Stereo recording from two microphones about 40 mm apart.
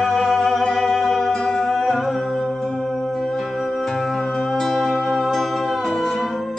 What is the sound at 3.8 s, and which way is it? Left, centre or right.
Music, centre.